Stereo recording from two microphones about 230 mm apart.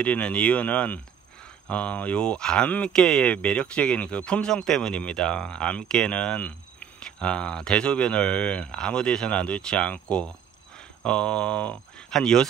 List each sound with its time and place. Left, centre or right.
0.0 s speech: centre